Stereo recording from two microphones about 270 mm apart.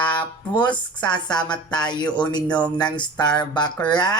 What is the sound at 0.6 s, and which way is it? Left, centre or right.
Speech, centre.